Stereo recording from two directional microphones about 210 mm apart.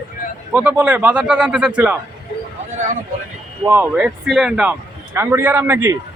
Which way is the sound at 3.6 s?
10° right (ahead or behind).